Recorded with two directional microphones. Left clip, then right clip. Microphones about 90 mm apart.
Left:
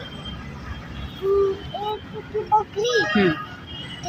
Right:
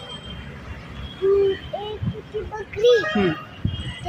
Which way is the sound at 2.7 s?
50° right (ahead or behind).